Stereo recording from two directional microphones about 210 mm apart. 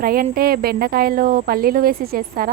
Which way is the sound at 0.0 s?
45° right (ahead or behind).